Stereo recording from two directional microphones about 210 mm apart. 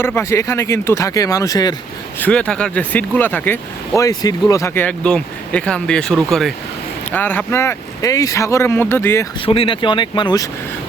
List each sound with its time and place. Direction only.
0.0 s speech: 10° left (ahead or behind)
2.2 s speech: 5° left (ahead or behind)
9.5 s speech: 25° left (ahead or behind)